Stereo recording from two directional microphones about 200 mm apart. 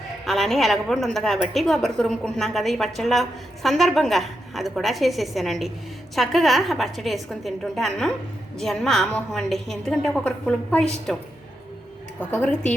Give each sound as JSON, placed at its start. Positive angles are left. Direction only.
{"t": 0.3, "sound": "a woman's voice", "side_deg": 0}